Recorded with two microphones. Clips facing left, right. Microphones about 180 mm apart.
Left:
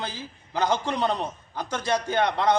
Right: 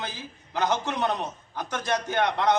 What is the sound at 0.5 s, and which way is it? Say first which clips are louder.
Speech: left 1 dB; 10° left (ahead or behind).